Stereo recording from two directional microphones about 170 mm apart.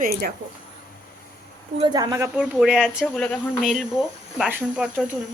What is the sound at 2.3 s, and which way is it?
Speech, 5° right (ahead or behind).